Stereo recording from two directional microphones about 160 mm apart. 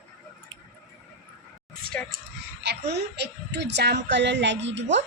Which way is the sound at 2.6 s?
90° right.